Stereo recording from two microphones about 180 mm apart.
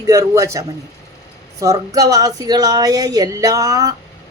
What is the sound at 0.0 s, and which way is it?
A man's voice, 20° right (ahead or behind).